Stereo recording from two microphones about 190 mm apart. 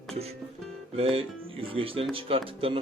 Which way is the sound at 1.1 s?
30° right (ahead or behind).